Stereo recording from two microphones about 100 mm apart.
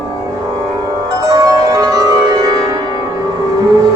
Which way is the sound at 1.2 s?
40° right (ahead or behind).